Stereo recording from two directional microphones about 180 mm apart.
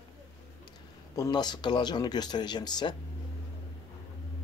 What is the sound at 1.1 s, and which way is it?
Speech, 25° left (ahead or behind).